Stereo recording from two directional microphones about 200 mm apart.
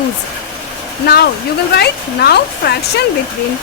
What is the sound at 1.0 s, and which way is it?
Speech, 55° left (ahead or behind).